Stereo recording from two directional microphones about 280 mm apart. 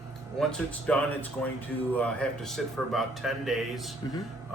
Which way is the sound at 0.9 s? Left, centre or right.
Centre.